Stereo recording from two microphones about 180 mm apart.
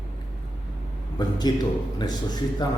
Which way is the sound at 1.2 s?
25° left (ahead or behind).